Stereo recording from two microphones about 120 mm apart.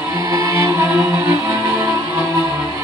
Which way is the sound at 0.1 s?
30° right (ahead or behind).